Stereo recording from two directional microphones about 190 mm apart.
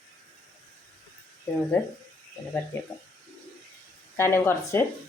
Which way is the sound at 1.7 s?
10° left (ahead or behind).